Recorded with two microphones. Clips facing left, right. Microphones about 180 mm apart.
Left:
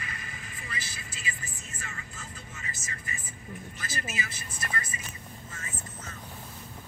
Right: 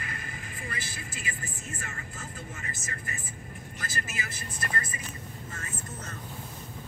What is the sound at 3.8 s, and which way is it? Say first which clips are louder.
Speech: even; 50° right (ahead or behind).